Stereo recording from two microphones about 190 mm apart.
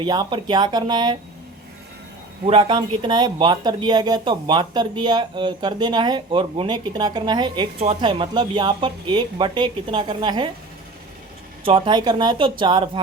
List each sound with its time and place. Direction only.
0.0 s speech: 20° right (ahead or behind)
2.5 s speech: 25° right (ahead or behind)
11.6 s speech: 25° right (ahead or behind)